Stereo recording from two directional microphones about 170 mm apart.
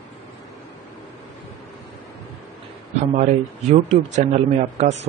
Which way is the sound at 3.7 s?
40° right (ahead or behind).